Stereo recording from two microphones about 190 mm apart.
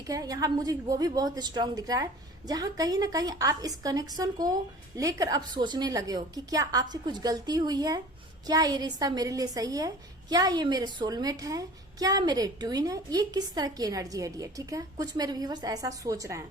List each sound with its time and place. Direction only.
0.1 s a woman's voice: 20° right (ahead or behind)